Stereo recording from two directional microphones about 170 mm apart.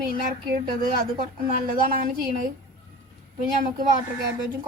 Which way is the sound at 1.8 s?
60° right (ahead or behind).